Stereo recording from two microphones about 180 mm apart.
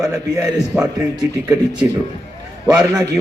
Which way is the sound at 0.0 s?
15° right (ahead or behind).